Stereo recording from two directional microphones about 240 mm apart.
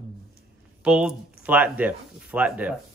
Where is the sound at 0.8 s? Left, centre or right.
Centre.